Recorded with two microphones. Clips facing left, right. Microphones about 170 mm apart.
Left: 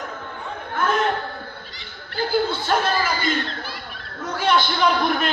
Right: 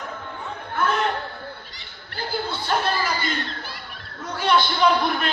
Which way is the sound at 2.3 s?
50° left (ahead or behind).